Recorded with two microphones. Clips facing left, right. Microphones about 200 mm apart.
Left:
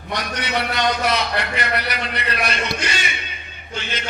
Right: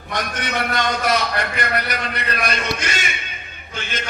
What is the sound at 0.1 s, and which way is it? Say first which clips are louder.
Speech: left 1 dB; 50° right (ahead or behind).